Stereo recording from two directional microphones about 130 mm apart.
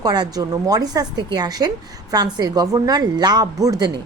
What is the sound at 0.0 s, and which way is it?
Speech, 30° right (ahead or behind).